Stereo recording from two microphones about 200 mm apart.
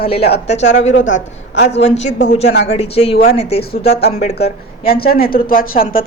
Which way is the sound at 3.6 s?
55° left (ahead or behind).